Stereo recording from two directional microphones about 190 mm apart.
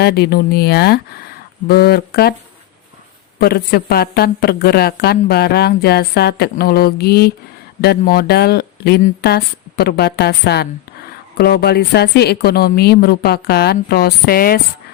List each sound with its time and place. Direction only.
0.0 s a woman's voice: 55° left (ahead or behind)
3.3 s a woman's voice: 55° left (ahead or behind)